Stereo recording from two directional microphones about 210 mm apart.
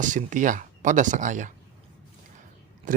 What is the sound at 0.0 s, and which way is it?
Speech, 35° right (ahead or behind).